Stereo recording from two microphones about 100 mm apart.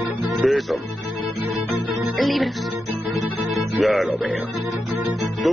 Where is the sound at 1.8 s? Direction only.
Centre (ahead or behind).